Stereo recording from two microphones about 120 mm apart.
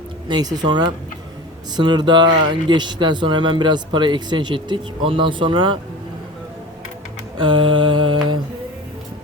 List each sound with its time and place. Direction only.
0.3 s speech: 35° right (ahead or behind)
7.3 s mantra: 45° right (ahead or behind)